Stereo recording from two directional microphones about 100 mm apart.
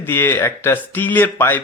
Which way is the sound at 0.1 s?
25° left (ahead or behind).